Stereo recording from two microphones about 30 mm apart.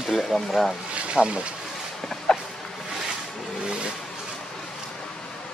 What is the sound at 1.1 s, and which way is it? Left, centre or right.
Speech, right.